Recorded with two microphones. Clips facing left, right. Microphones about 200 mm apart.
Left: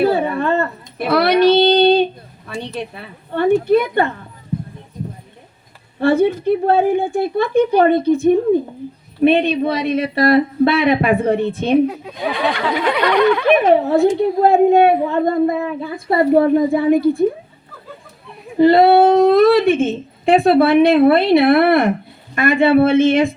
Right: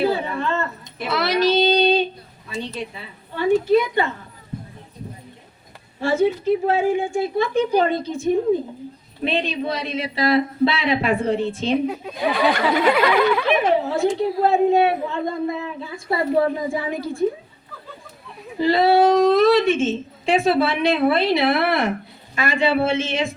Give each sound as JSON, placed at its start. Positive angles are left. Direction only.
{"t": 0.0, "sound": "a sound", "side_deg": 55}
{"t": 2.5, "sound": "a woman's voice", "side_deg": 60}
{"t": 6.0, "sound": "a woman's voice", "side_deg": 60}
{"t": 11.9, "sound": "a sound", "side_deg": 0}
{"t": 13.7, "sound": "a woman's voice", "side_deg": 55}
{"t": 18.6, "sound": "a woman's voice", "side_deg": 60}